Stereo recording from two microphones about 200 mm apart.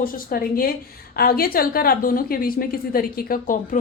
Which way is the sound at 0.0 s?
45° left (ahead or behind).